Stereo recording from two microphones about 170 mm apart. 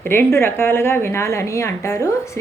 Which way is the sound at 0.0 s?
15° left (ahead or behind).